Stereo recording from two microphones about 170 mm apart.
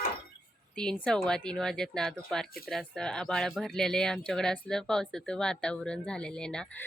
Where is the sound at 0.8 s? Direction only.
5° left (ahead or behind).